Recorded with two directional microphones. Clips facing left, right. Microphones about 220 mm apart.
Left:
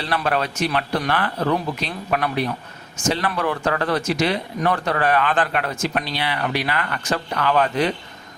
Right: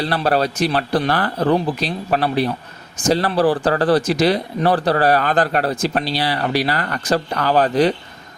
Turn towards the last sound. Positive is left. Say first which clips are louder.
# right 4 dB
turn(degrees=-35)  # may be behind; listen again after turning